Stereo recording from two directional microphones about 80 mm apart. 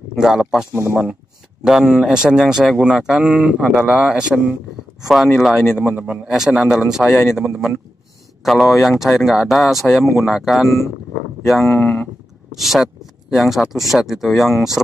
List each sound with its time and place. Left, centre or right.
0.1 s a man's voice: centre
11.8 s speech: centre
12.5 s speech: centre